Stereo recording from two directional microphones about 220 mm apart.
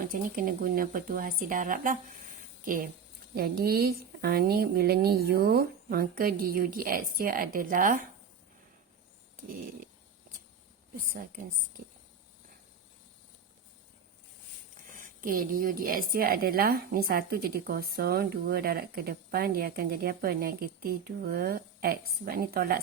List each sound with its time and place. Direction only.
0.1 s a woman's voice: 40° right (ahead or behind)
9.3 s a sound: 40° right (ahead or behind)
14.9 s a woman's voice: 40° right (ahead or behind)